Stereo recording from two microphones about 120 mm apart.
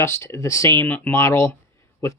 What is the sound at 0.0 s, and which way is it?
Speech, 20° left (ahead or behind).